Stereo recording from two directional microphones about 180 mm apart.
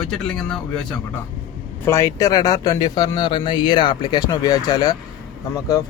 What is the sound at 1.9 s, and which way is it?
Speech, 20° left (ahead or behind).